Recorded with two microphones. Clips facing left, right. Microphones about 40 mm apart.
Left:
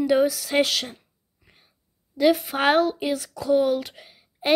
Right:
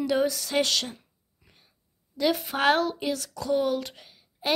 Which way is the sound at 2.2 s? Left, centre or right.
Centre.